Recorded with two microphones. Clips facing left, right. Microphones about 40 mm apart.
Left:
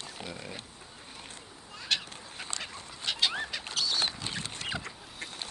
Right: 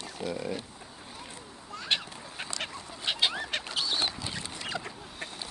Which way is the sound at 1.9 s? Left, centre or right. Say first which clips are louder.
Right 1 dB; right.